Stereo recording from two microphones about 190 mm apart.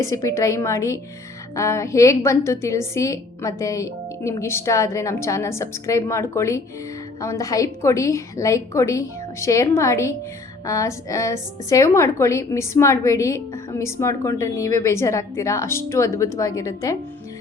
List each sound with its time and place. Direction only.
0.0 s a woman's voice: 15° left (ahead or behind)